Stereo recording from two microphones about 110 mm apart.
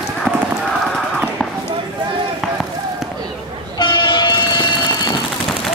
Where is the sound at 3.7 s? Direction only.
45° left (ahead or behind).